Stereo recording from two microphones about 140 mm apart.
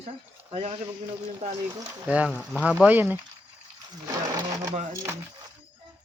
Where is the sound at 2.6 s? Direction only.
5° right (ahead or behind).